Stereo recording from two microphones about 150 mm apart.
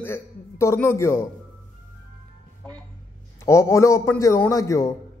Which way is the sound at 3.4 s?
20° left (ahead or behind).